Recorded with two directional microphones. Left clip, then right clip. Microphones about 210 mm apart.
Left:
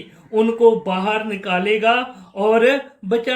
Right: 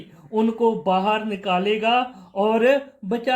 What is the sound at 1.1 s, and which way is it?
A man's voice, 40° right (ahead or behind).